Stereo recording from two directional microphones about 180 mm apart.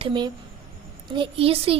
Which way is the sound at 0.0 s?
25° right (ahead or behind).